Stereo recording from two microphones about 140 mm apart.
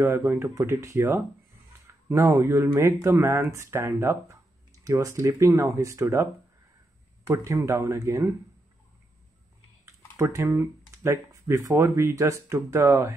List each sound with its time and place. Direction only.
0.0 s speech: 15° right (ahead or behind)
7.2 s speech: 20° right (ahead or behind)
10.1 s speech: 20° right (ahead or behind)